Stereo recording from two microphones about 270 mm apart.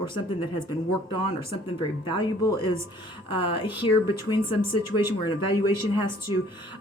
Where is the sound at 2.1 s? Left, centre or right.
Centre.